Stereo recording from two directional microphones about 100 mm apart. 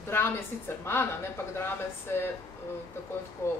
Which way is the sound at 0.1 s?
25° left (ahead or behind).